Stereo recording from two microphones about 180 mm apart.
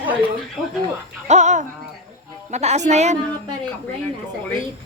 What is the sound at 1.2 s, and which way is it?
A woman's voice, 40° right (ahead or behind).